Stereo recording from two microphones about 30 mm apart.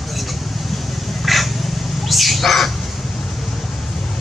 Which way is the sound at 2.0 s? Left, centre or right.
Centre.